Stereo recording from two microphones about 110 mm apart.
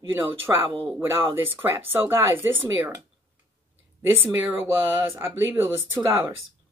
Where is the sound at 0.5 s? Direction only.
25° right (ahead or behind).